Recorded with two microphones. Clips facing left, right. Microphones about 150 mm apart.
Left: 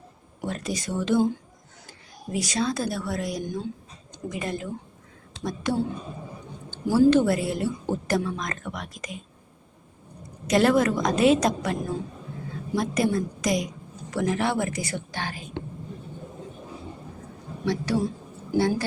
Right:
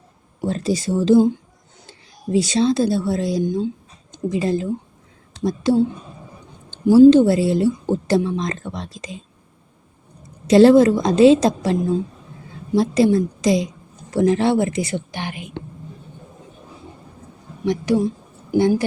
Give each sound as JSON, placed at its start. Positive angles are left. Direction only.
{"t": 0.4, "sound": "a woman's voice", "side_deg": -30}
{"t": 10.4, "sound": "a woman's voice", "side_deg": -30}
{"t": 18.5, "sound": "a woman's voice", "side_deg": -20}